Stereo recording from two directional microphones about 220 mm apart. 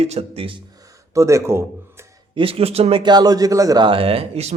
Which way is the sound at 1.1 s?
15° right (ahead or behind).